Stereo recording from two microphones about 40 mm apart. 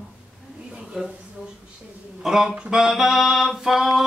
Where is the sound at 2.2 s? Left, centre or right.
Centre.